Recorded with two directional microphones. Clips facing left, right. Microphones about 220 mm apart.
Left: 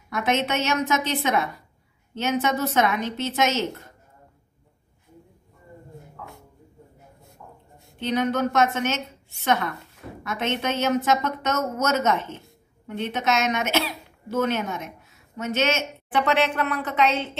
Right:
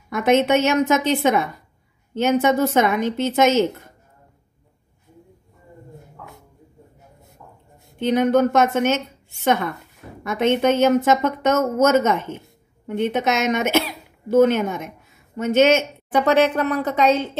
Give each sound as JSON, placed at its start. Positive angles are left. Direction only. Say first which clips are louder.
{"t": 0.1, "sound": "speech", "louder": "right 8 dB", "side_deg": -50}
{"t": 8.0, "sound": "speech", "louder": "right 7 dB", "side_deg": -50}
{"t": 10.6, "sound": "a woman's voice", "louder": "right 7 dB", "side_deg": -50}